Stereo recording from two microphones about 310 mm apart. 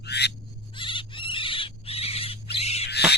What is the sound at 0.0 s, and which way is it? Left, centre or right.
Goat, left.